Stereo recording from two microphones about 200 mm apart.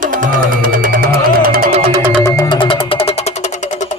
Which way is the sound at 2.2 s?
15° left (ahead or behind).